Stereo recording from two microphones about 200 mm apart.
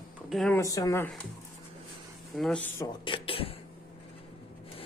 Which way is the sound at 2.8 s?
20° left (ahead or behind).